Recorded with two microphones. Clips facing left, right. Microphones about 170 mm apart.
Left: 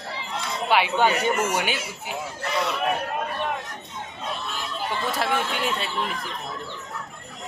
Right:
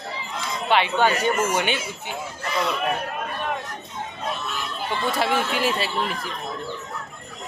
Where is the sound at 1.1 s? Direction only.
65° left (ahead or behind).